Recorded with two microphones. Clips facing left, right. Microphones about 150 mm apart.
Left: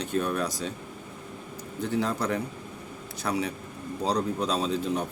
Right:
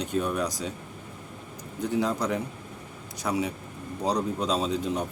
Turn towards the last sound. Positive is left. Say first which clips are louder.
# even
turn(degrees=-20)  # may be behind; listen again after turning